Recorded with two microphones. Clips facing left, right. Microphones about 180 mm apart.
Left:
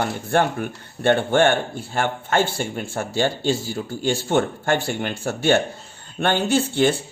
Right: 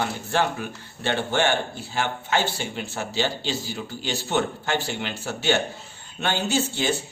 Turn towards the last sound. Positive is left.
turn(degrees=55)  # may be behind; listen again after turning